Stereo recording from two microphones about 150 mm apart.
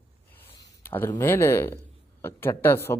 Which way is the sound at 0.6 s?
15° left (ahead or behind).